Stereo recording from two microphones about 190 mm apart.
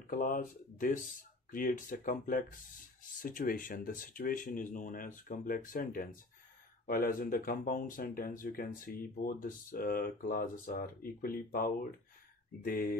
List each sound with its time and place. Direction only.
0.0 s speech: 45° left (ahead or behind)